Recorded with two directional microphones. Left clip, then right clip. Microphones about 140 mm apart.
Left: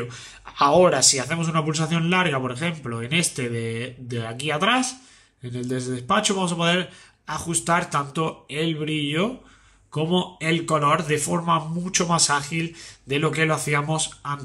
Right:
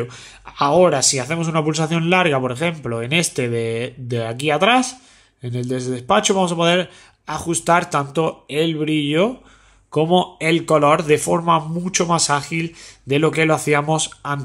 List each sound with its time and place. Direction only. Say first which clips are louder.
0.0 s speech: right 5 dB; 25° right (ahead or behind)
0.5 s a man's voice: right 2 dB; 15° right (ahead or behind); by 14.4 s 40° right (ahead or behind)